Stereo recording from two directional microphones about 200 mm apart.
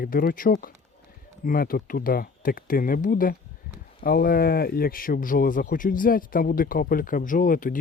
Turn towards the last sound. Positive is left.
turn(degrees=45)  # may be behind; listen again after turning